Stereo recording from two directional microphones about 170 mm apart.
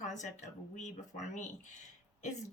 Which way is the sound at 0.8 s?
45° left (ahead or behind).